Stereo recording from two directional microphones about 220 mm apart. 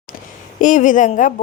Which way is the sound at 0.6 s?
35° left (ahead or behind).